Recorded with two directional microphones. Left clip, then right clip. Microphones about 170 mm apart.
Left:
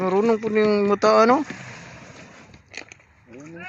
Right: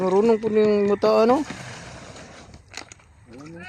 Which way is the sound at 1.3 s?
Centre (ahead or behind).